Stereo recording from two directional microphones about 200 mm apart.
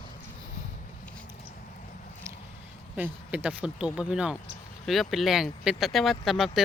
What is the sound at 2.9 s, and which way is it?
Speech, 5° right (ahead or behind).